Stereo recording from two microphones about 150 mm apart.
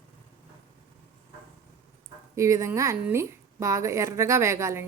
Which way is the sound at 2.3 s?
20° right (ahead or behind).